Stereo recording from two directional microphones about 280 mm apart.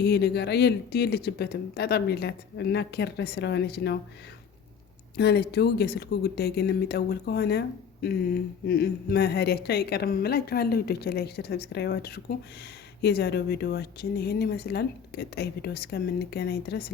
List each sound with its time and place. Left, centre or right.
0.0 s a woman's voice: left
5.1 s a woman's voice: left